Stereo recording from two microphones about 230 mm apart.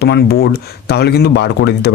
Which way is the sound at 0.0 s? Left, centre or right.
Left.